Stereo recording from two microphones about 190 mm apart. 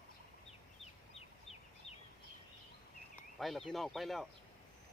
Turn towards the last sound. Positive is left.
turn(degrees=0)  # may be behind; listen again after turning